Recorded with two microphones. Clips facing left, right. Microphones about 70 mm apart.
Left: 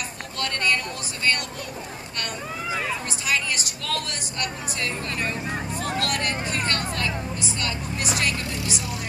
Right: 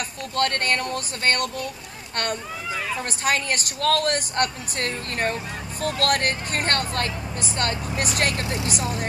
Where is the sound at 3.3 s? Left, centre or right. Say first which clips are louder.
Right 2 dB; right.